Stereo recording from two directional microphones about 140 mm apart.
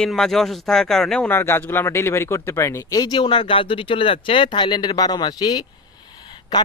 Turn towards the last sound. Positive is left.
turn(degrees=30)  # may be behind; listen again after turning